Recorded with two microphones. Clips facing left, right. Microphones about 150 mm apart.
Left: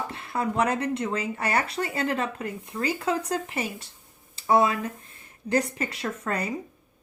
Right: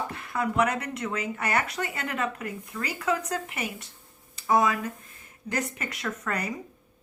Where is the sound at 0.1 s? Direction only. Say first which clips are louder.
Left 1 dB; 30° left (ahead or behind).